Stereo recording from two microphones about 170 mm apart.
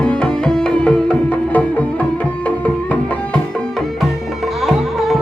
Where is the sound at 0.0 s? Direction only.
5° left (ahead or behind).